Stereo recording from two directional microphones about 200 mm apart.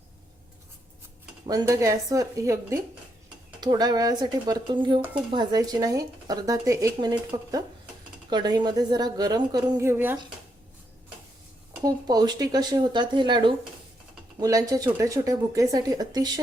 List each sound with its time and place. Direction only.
1.5 s a woman's voice: 20° right (ahead or behind)
11.7 s a woman's voice: 20° right (ahead or behind)